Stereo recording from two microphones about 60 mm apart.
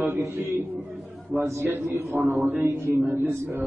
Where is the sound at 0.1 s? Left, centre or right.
Right.